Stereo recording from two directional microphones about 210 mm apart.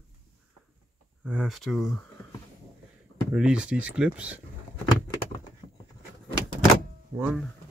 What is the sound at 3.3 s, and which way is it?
Speech, 5° right (ahead or behind).